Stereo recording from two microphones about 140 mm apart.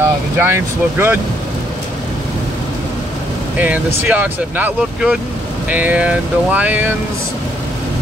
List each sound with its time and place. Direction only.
0.4 s speech: 15° right (ahead or behind)
3.5 s speech: 10° right (ahead or behind)